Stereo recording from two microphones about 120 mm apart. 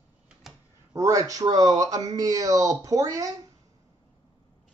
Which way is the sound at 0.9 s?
25° right (ahead or behind).